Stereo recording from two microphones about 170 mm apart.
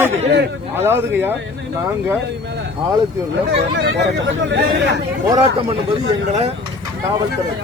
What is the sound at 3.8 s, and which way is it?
Speech, 90° right.